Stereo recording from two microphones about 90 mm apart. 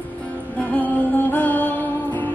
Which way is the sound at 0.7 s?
20° left (ahead or behind).